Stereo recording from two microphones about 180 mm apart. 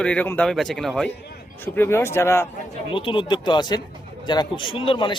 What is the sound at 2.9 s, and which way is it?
A man's voice, 30° left (ahead or behind).